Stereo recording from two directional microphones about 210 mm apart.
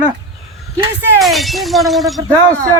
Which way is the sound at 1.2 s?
Centre (ahead or behind).